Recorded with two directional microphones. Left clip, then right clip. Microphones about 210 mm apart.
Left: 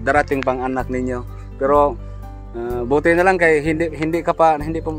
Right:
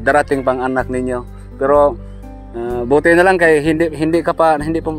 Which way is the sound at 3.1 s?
30° right (ahead or behind).